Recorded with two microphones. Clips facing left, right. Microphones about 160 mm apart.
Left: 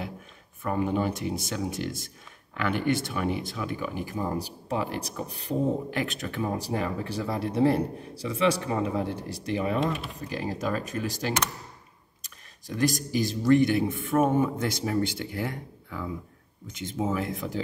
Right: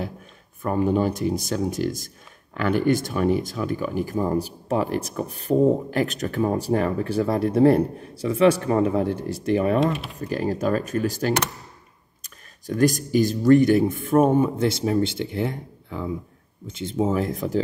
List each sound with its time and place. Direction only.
0.6 s speech: 35° right (ahead or behind)